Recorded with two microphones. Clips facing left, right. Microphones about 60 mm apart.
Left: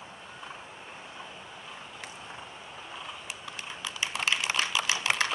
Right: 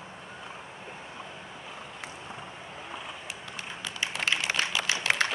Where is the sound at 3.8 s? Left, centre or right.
Centre.